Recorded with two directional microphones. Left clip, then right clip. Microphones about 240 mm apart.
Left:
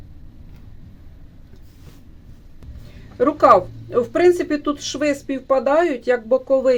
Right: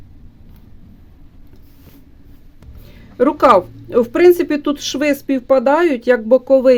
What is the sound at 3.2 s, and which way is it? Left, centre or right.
Speech, right.